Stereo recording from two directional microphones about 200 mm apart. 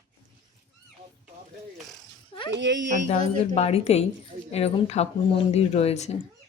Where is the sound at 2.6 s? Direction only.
65° right (ahead or behind).